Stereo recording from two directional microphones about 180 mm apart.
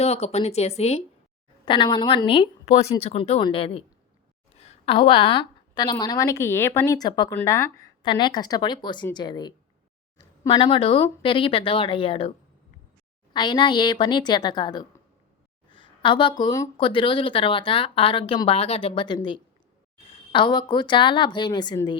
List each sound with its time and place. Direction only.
0.0 s a woman's voice: 35° left (ahead or behind)
13.3 s speech: 25° left (ahead or behind)